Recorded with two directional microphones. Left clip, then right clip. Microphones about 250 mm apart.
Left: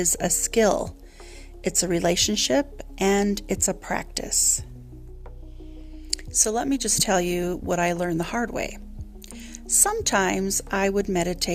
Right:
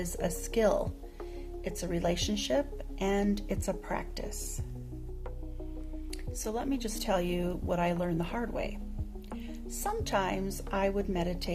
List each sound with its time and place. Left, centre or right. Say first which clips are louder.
0.0 s speech: left 10 dB; left
6.1 s speech: left 14 dB; left